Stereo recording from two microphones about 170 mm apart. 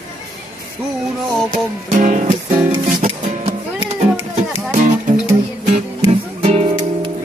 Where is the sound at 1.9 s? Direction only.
50° right (ahead or behind).